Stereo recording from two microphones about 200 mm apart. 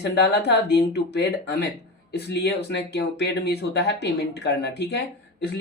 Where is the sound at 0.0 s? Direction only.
60° left (ahead or behind).